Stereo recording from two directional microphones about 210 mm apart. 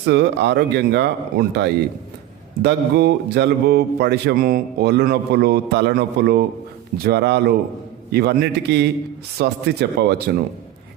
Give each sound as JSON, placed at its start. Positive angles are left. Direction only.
{"t": 0.0, "sound": "speech", "side_deg": -55}